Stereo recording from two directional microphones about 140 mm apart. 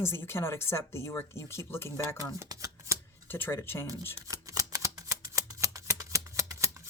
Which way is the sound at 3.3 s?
15° left (ahead or behind).